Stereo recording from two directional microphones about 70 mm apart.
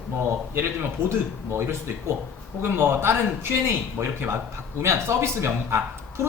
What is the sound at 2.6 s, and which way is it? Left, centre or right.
Speech, right.